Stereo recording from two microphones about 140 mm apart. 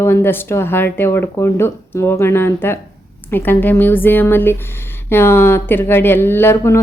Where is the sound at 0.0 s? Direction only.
15° left (ahead or behind).